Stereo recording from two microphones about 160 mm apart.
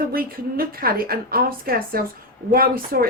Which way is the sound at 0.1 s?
70° right (ahead or behind).